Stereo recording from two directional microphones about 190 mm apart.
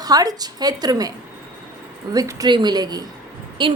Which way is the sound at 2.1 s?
20° right (ahead or behind).